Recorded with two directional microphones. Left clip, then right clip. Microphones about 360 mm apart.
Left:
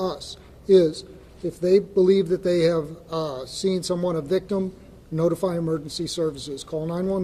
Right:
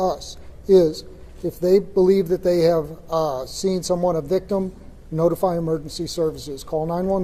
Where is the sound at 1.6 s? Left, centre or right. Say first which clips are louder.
Right 2 dB; right; by 7.2 s centre.